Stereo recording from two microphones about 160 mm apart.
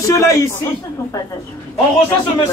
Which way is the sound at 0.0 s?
20° left (ahead or behind).